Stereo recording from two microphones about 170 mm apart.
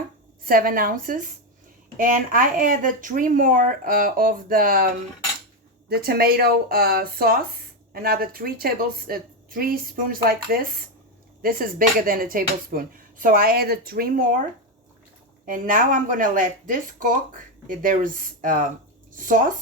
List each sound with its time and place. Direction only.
0.4 s speech: 55° right (ahead or behind)
5.9 s speech: 65° right (ahead or behind)
15.4 s speech: 55° right (ahead or behind)